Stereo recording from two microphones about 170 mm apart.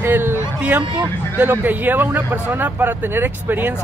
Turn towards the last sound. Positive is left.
turn(degrees=-10)  # may be behind; listen again after turning